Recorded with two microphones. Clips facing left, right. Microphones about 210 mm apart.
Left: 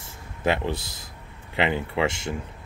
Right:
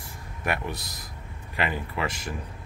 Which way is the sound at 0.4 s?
25° left (ahead or behind).